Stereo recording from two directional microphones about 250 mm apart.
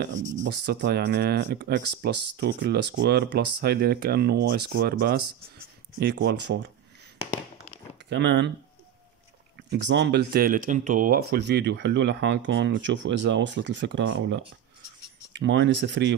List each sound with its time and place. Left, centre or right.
0.1 s speech: right
0.4 s speech: right
8.1 s speech: right
9.7 s speech: right